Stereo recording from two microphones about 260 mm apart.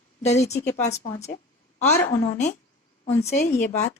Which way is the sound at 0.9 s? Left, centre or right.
Centre.